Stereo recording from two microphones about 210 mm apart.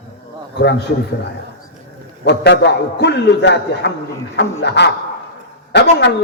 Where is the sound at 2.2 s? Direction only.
55° left (ahead or behind).